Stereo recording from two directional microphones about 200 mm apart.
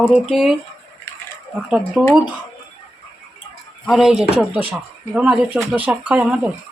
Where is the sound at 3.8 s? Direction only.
Centre (ahead or behind).